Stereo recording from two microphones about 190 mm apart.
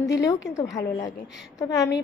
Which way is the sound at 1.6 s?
20° left (ahead or behind).